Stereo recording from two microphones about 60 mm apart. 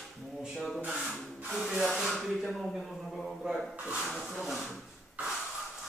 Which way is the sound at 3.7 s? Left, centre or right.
Right.